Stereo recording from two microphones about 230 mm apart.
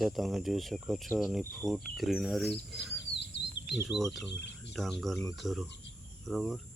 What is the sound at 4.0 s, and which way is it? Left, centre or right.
Speech, centre.